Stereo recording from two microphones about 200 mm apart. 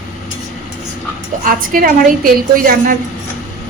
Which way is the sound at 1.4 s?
45° right (ahead or behind).